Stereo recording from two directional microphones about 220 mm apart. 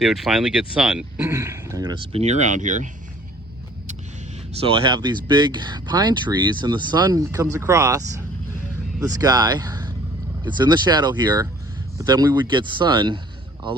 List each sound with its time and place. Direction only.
0.0 s speech: centre (ahead or behind)
2.1 s speech: 30° right (ahead or behind)
4.8 s speech: 20° right (ahead or behind)